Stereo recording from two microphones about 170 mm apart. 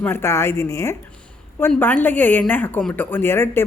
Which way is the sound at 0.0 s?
15° left (ahead or behind).